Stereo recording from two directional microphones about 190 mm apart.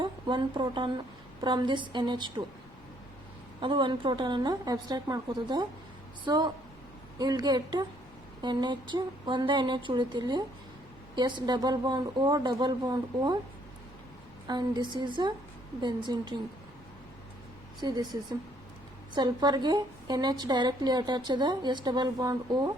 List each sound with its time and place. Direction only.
0.0 s a woman's voice: 25° right (ahead or behind)
3.6 s a woman's voice: 25° right (ahead or behind)
14.4 s a woman's voice: 25° right (ahead or behind)
17.8 s a woman's voice: 25° right (ahead or behind)